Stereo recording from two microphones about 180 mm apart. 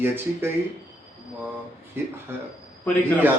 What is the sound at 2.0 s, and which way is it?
Speech, 10° right (ahead or behind).